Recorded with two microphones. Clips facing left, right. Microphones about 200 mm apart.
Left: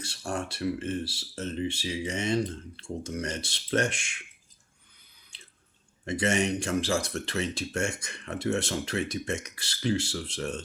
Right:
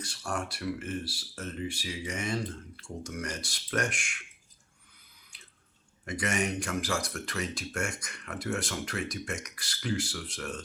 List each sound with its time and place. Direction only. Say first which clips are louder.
0.0 s speech: left 2 dB; 25° left (ahead or behind)
5.3 s drip: left 3 dB; 25° left (ahead or behind)
6.1 s speech: left 5 dB; 25° left (ahead or behind)